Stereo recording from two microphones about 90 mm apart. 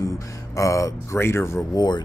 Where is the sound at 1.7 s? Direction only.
50° left (ahead or behind).